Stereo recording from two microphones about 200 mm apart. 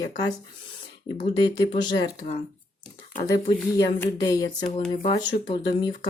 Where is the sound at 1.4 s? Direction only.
20° left (ahead or behind).